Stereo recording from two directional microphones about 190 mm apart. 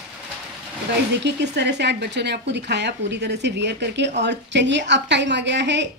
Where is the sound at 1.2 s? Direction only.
65° right (ahead or behind).